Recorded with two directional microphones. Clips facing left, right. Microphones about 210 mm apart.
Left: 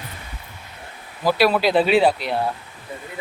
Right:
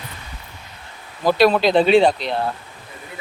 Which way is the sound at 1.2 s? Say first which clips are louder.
Right 3 dB; 5° left (ahead or behind).